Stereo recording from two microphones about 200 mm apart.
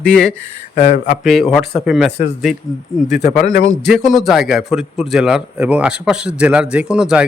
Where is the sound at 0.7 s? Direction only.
40° left (ahead or behind).